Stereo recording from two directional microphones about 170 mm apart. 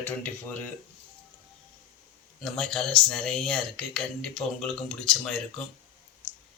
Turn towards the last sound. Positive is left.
turn(degrees=5)  # may be behind; listen again after turning